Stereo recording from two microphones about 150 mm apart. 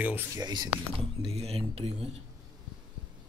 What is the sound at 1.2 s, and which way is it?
Speech, 40° right (ahead or behind).